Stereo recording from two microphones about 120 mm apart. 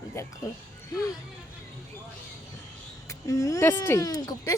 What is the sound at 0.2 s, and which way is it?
Speech, 25° left (ahead or behind).